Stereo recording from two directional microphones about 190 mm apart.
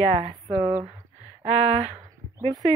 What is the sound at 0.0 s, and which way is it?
Speech, 35° right (ahead or behind).